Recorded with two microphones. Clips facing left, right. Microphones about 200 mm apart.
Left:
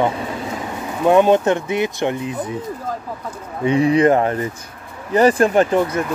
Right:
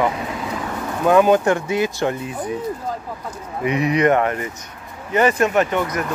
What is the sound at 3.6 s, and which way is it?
Speech, 30° left (ahead or behind).